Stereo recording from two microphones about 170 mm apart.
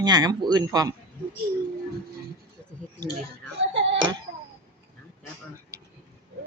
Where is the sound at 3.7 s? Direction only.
90° right.